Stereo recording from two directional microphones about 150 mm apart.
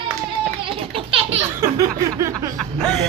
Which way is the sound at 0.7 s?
35° right (ahead or behind).